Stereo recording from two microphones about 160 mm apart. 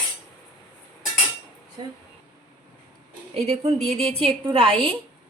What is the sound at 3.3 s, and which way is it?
A woman's voice, 40° right (ahead or behind).